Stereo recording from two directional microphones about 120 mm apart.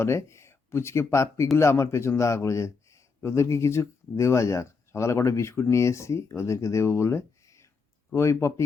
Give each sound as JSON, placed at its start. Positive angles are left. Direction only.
{"t": 0.0, "sound": "a man's voice", "side_deg": 25}